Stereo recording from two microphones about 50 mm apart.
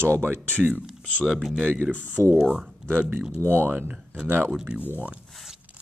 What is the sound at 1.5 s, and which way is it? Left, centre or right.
Speech, left.